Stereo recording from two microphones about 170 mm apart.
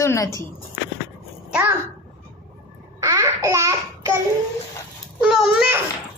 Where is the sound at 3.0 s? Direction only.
15° right (ahead or behind).